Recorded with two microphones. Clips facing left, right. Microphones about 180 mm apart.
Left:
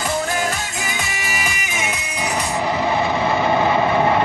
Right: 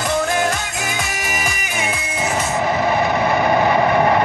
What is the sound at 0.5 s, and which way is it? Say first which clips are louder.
Music: right 2 dB; 45° right (ahead or behind).